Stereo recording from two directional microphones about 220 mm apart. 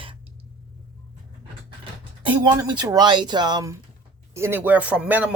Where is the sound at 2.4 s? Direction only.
20° right (ahead or behind).